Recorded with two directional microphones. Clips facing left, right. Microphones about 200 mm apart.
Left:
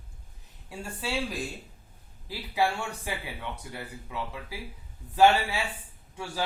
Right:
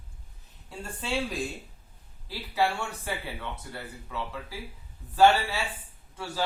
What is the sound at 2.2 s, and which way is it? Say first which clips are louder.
A man's voice: even; 15° left (ahead or behind).